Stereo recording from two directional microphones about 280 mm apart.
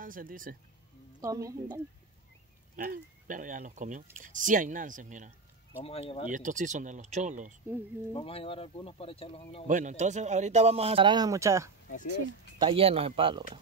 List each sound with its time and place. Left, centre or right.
0.0 s speech: right
1.2 s a woman's voice: centre
2.7 s speech: right
5.8 s speech: left
6.3 s speech: right
8.1 s speech: centre
9.7 s speech: right